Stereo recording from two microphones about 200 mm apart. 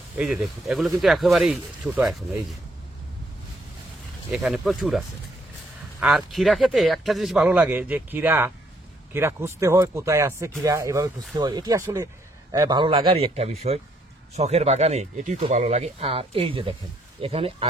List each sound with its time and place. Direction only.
0.2 s speech: centre (ahead or behind)
4.3 s a man's voice: centre (ahead or behind); by 17.6 s 30° right (ahead or behind)